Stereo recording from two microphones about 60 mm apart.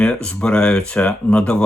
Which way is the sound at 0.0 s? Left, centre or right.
Centre.